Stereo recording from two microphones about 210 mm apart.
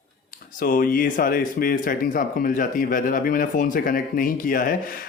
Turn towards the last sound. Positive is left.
turn(degrees=40)  # may be behind; listen again after turning